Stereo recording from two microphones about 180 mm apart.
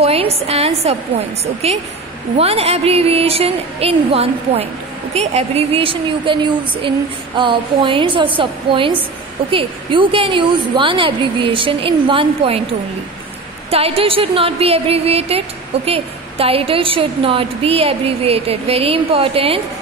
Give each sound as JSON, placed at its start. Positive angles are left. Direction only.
{"t": 0.0, "sound": "a woman's voice", "side_deg": -35}
{"t": 13.7, "sound": "speech", "side_deg": -35}